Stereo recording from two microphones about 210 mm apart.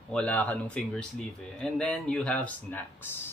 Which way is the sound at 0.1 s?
5° left (ahead or behind).